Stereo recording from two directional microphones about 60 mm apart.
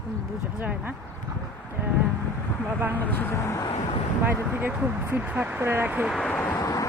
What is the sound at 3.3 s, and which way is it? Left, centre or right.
Speech, left.